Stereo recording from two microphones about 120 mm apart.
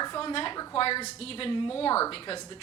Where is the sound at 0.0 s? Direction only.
35° left (ahead or behind).